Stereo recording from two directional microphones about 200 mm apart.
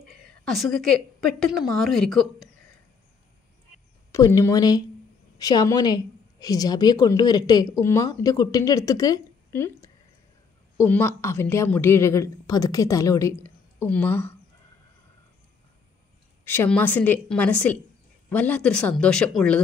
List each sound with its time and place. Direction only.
0.5 s speech: centre (ahead or behind)
4.1 s a woman's voice: 15° left (ahead or behind)
16.4 s a woman's voice: 10° left (ahead or behind)